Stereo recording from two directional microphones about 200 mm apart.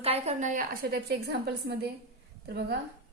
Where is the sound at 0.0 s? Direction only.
30° right (ahead or behind); by 2.7 s 50° right (ahead or behind).